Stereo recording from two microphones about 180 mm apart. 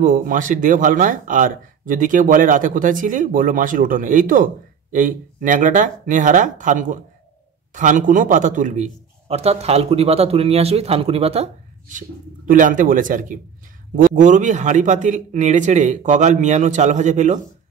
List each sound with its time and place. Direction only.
0.0 s a man's voice: 50° right (ahead or behind)
12.4 s a man's voice: 45° right (ahead or behind)